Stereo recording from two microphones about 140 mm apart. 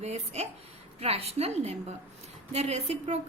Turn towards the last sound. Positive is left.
turn(degrees=-55)  # may be behind; listen again after turning